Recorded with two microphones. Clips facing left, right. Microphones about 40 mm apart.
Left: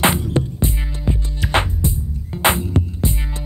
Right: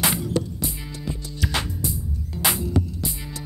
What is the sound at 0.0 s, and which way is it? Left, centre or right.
Music, left.